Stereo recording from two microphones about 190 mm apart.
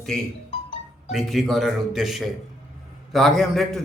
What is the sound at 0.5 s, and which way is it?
Music, 30° left (ahead or behind).